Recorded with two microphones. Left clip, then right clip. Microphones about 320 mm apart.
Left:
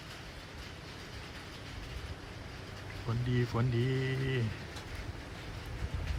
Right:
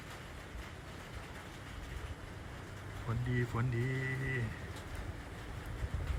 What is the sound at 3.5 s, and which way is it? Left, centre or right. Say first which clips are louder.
Speech: left 4 dB; centre.